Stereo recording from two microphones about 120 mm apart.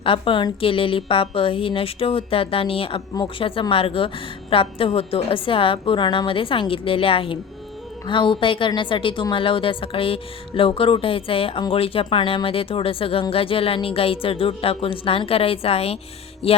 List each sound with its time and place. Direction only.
0.0 s a woman's voice: 50° left (ahead or behind)